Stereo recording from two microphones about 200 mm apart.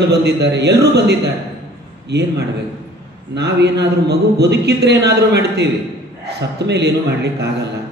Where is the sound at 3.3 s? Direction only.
55° right (ahead or behind).